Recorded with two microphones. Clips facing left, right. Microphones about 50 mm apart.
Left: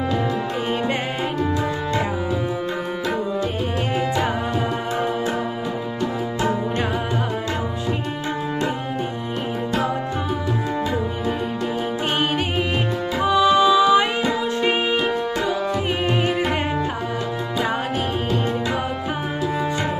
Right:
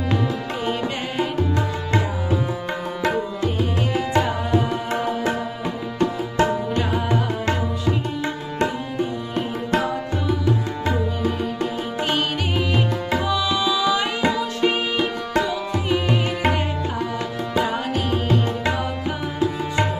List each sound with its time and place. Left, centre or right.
13.2 s tabla: left
15.9 s music: left